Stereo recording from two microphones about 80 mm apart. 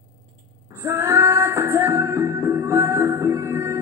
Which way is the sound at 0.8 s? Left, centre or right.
Right.